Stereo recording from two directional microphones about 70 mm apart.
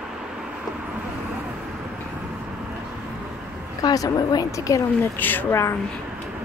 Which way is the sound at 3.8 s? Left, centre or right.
Left.